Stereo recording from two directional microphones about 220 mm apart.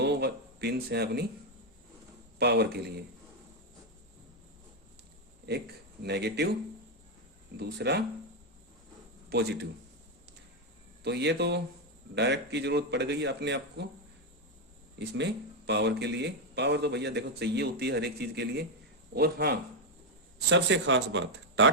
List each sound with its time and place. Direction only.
0.0 s speech: 50° right (ahead or behind)
2.4 s a man's voice: 50° right (ahead or behind)
5.5 s a man's voice: 50° right (ahead or behind)
7.5 s a man's voice: 50° right (ahead or behind)
9.3 s a man's voice: 45° right (ahead or behind)
11.0 s a man's voice: 50° right (ahead or behind)
14.9 s a man's voice: 50° right (ahead or behind)